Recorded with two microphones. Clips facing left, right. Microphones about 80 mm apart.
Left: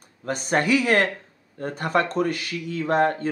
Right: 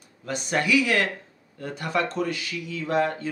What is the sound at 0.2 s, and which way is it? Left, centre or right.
Speech, left.